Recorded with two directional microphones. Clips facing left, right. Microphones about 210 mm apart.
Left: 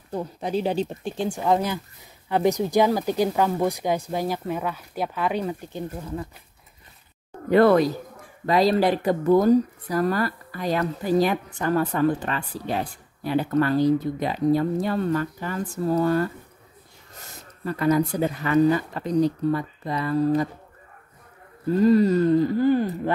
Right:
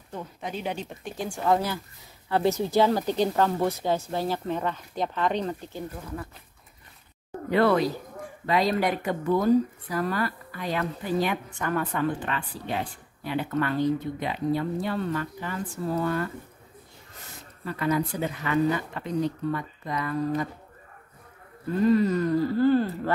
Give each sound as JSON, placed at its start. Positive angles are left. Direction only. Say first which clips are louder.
{"t": 0.1, "sound": "speech", "louder": "left 8 dB", "side_deg": 35}
{"t": 1.2, "sound": "speech", "louder": "left 2 dB", "side_deg": 20}
{"t": 7.5, "sound": "speech", "louder": "left 5 dB", "side_deg": 45}
{"t": 17.6, "sound": "speech", "louder": "left 5 dB", "side_deg": 40}
{"t": 21.8, "sound": "speech", "louder": "left 4 dB", "side_deg": 35}